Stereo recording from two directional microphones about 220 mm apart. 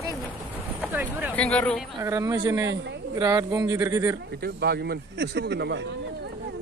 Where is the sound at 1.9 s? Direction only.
15° right (ahead or behind).